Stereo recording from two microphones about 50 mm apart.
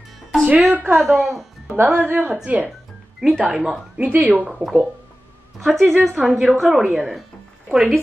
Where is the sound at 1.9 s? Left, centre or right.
Right.